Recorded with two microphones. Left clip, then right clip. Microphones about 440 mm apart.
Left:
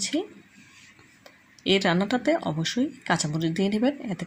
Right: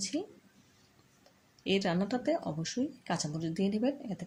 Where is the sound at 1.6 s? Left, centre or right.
Left.